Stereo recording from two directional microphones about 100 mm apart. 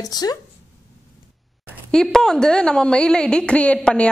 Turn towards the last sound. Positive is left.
turn(degrees=10)  # may be behind; listen again after turning